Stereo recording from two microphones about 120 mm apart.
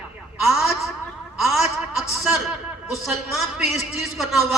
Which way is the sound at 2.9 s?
Centre (ahead or behind).